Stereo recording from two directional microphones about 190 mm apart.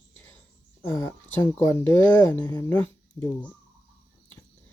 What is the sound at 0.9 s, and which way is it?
Speech, 15° left (ahead or behind).